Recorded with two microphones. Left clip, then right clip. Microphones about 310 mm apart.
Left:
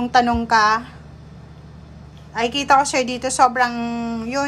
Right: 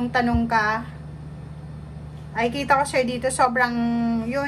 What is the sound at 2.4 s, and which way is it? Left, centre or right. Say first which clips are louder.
A woman's voice: left 4 dB; centre.